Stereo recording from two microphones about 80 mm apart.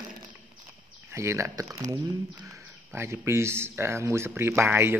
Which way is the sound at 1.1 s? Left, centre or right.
Right.